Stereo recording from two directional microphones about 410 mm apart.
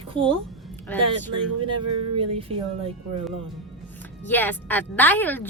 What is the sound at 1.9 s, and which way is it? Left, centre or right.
Speech, right.